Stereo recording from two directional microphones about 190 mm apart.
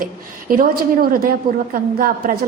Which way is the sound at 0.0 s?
45° right (ahead or behind).